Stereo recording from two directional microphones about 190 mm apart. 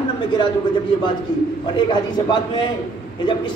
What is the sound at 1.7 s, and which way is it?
Speech, 25° left (ahead or behind).